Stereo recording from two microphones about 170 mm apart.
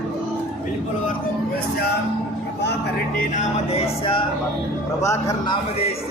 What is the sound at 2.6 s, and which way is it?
Vehicle, 80° left.